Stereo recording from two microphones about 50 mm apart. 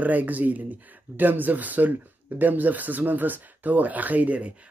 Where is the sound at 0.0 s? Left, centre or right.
Right.